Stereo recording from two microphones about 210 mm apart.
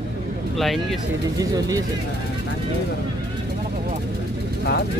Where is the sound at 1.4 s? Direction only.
15° right (ahead or behind).